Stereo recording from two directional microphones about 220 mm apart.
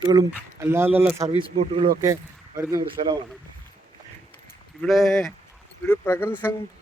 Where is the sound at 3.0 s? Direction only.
30° right (ahead or behind).